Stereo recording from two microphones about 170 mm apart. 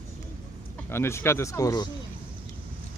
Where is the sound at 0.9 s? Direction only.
15° left (ahead or behind).